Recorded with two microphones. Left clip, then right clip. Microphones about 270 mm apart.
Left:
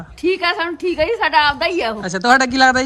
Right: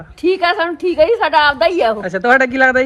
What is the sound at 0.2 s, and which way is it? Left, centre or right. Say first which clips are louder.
A woman's voice: right 3 dB; centre.